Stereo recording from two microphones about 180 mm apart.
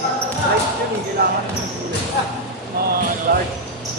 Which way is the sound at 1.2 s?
60° right (ahead or behind).